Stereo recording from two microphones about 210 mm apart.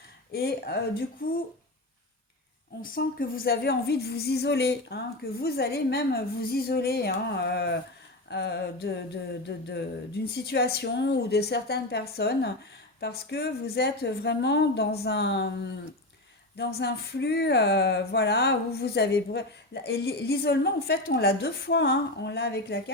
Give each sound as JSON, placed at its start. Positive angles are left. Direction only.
{"t": 0.3, "sound": "speech", "side_deg": 50}
{"t": 2.8, "sound": "speech", "side_deg": 40}